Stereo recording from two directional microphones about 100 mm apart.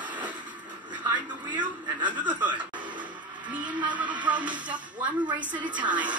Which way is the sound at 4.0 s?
15° right (ahead or behind).